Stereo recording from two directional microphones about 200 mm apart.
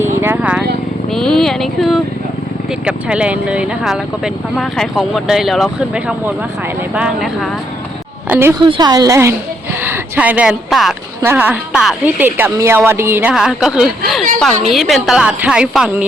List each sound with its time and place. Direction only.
0.2 s vehicle: 10° right (ahead or behind)
1.1 s a sound: centre (ahead or behind)
2.8 s a woman's voice: 5° right (ahead or behind)